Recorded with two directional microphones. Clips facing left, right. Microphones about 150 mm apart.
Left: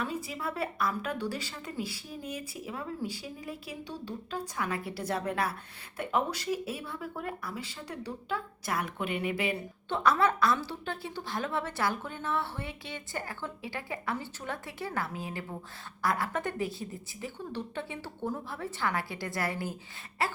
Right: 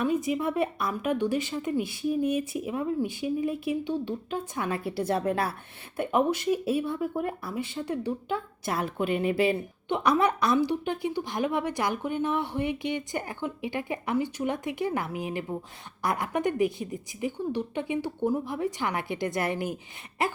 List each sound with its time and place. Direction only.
0.0 s speech: 20° right (ahead or behind)
9.9 s a woman's voice: 15° right (ahead or behind)